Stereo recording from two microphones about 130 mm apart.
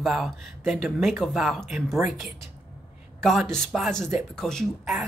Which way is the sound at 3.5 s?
Centre (ahead or behind).